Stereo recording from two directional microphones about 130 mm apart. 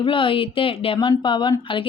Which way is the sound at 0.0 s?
40° left (ahead or behind).